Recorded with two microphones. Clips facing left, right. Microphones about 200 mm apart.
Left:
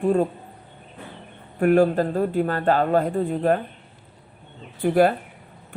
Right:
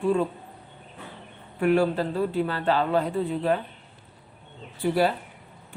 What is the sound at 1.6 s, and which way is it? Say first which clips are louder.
Speech: left 4 dB; 50° left (ahead or behind).